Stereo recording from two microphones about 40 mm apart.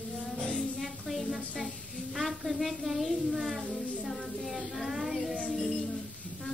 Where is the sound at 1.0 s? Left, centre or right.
Centre.